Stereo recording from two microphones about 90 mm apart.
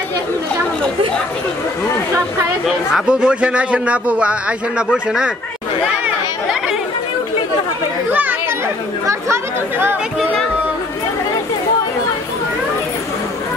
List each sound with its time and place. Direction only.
2.9 s a man's voice: 10° right (ahead or behind)
8.1 s a child's voice: 20° right (ahead or behind)
9.0 s speech: 30° right (ahead or behind)